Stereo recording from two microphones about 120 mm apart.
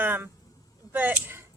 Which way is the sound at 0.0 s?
15° right (ahead or behind).